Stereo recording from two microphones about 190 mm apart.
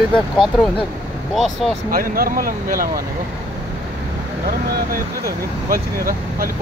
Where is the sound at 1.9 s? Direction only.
50° right (ahead or behind).